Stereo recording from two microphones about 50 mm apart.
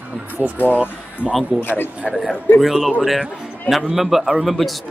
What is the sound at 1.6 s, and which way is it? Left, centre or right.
Speech, left.